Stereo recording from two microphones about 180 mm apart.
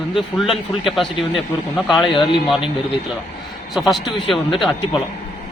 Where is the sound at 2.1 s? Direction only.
25° left (ahead or behind).